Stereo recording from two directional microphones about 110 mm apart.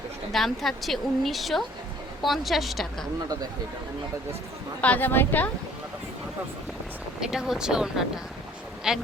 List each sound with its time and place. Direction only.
0.3 s speech: centre (ahead or behind)
4.8 s a woman's voice: 15° left (ahead or behind)
7.2 s speech: 5° right (ahead or behind)